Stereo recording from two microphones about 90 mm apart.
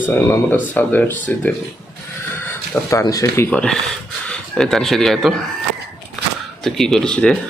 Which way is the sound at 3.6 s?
10° left (ahead or behind).